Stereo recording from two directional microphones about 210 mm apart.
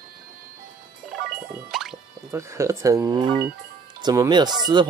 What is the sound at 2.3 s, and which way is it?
Speech, 15° right (ahead or behind).